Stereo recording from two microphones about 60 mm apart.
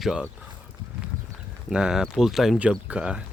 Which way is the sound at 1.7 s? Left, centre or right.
Centre.